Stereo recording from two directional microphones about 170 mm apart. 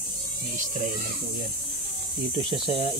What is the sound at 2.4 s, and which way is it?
Speech, 35° right (ahead or behind).